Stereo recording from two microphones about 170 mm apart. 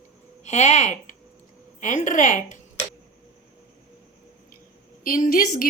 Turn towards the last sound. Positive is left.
turn(degrees=60)  # may be behind; listen again after turning